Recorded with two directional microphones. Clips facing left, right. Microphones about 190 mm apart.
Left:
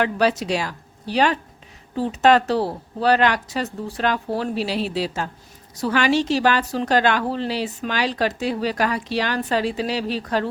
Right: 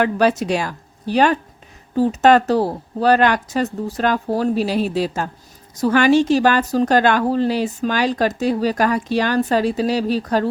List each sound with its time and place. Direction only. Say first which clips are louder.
0.0 s a woman's voice: right 3 dB; 50° right (ahead or behind)